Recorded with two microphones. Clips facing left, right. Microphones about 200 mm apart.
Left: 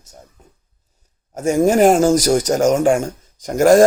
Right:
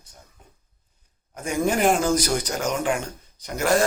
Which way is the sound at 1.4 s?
45° left (ahead or behind).